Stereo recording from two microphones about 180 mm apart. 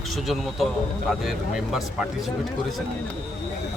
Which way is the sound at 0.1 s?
Centre (ahead or behind).